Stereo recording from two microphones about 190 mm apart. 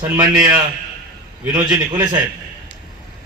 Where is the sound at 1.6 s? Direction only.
20° right (ahead or behind).